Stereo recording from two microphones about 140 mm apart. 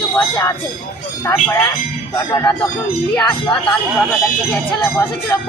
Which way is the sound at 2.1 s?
20° left (ahead or behind).